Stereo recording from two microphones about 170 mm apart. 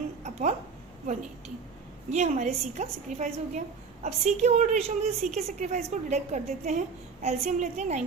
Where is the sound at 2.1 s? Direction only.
45° right (ahead or behind).